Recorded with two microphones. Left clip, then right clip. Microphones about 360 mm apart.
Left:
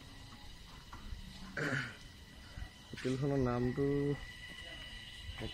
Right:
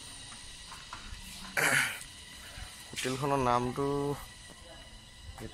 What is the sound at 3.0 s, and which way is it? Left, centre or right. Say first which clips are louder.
Mantra: right 6 dB; right.